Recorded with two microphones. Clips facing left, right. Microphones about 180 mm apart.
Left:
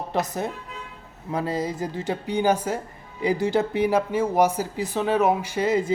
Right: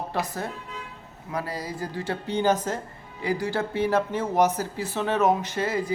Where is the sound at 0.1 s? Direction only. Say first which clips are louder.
Left 6 dB; 20° left (ahead or behind).